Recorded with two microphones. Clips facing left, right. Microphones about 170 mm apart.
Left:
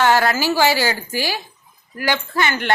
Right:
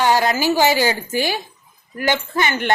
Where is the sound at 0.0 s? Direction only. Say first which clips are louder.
Even; 15° right (ahead or behind).